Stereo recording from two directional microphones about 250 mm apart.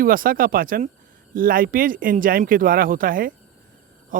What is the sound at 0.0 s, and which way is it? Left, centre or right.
Speech, right.